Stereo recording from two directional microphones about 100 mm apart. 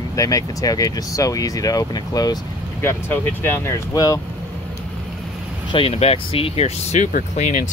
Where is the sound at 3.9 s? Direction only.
40° left (ahead or behind).